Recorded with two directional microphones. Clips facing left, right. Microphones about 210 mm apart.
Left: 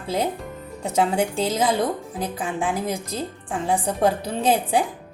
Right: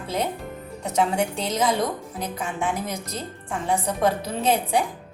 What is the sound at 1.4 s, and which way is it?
A woman's voice, 30° left (ahead or behind).